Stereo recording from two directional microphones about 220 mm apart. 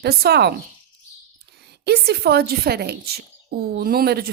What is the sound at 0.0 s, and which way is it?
Speech, 45° right (ahead or behind).